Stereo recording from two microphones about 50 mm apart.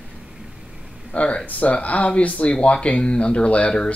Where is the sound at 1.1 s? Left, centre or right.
Left.